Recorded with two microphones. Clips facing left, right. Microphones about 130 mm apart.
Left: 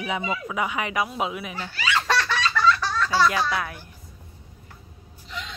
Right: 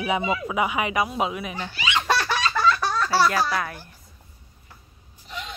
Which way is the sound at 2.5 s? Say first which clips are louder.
Left 1 dB; 40° right (ahead or behind).